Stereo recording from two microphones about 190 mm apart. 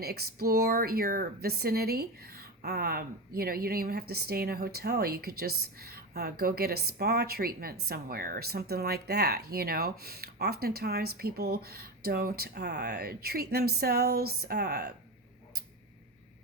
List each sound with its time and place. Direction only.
0.0 s speech: 55° right (ahead or behind)